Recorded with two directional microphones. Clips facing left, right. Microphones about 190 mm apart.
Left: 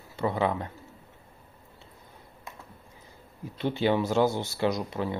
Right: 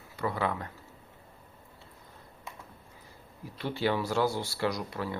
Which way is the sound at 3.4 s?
20° left (ahead or behind).